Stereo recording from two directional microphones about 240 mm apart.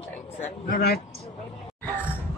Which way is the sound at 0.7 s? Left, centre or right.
Left.